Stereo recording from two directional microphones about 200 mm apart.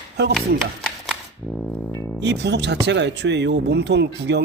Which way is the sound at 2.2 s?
60° right (ahead or behind).